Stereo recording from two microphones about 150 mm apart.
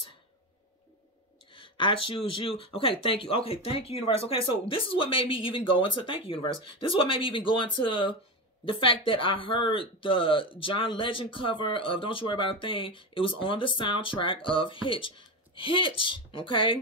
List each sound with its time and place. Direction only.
1.5 s speech: 35° left (ahead or behind)